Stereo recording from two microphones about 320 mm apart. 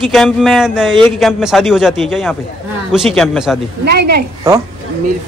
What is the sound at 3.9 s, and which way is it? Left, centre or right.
Speech, right.